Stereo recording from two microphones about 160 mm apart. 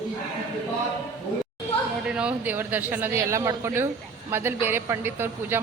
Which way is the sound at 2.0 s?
5° right (ahead or behind).